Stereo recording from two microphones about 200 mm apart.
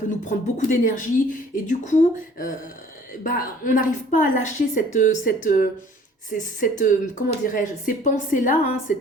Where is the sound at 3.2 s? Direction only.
45° left (ahead or behind).